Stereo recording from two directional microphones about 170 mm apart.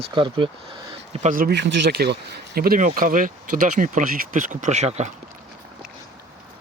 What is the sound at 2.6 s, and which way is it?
Speech, 55° right (ahead or behind).